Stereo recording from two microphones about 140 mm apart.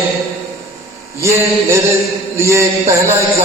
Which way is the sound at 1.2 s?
20° right (ahead or behind).